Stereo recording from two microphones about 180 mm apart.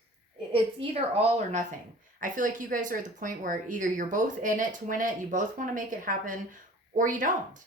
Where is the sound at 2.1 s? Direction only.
50° right (ahead or behind).